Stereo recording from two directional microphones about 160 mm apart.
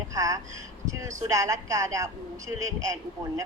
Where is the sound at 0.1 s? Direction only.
20° right (ahead or behind).